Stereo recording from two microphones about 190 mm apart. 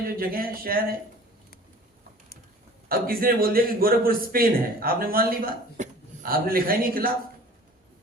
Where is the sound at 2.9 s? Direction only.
50° right (ahead or behind).